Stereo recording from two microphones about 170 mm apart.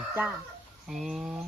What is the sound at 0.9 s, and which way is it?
Speech, centre (ahead or behind).